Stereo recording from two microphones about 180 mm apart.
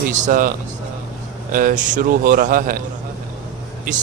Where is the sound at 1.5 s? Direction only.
50° right (ahead or behind).